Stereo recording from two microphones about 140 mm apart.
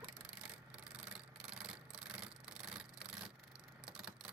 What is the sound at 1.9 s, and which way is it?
Rub, 5° right (ahead or behind).